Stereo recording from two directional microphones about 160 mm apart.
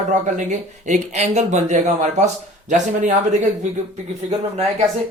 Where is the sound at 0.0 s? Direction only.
50° right (ahead or behind).